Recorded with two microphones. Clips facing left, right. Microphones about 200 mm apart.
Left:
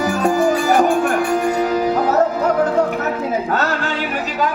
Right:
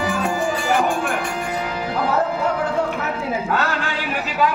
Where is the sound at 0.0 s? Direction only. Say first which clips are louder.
Left 6 dB; 40° left (ahead or behind).